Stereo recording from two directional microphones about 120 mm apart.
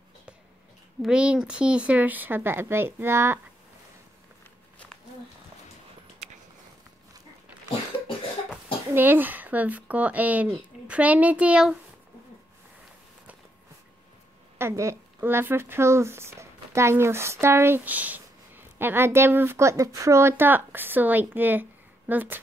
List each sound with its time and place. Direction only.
1.0 s speech: 10° right (ahead or behind)
8.9 s speech: 15° right (ahead or behind)
14.6 s speech: 25° right (ahead or behind)